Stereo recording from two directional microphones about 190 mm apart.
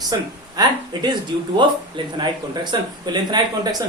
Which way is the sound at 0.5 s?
20° right (ahead or behind).